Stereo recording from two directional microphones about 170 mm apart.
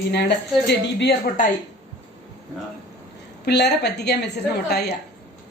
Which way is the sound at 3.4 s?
80° left.